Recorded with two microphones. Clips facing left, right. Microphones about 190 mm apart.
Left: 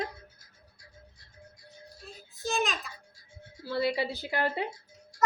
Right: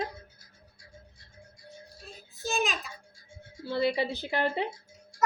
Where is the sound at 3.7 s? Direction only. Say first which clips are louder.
Right 1 dB; 25° right (ahead or behind).